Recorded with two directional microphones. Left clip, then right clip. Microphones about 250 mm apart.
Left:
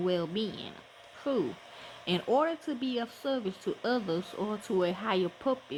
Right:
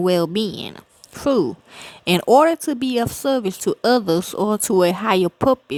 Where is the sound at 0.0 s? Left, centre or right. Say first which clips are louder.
Right 12 dB; right.